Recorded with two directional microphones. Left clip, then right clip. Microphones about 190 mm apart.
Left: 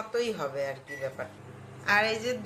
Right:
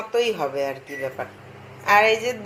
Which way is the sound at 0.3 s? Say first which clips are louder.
Right 8 dB; 15° right (ahead or behind).